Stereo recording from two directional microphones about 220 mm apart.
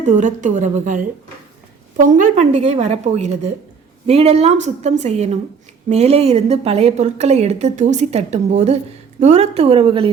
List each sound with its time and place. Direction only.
0.0 s a woman's voice: 35° right (ahead or behind)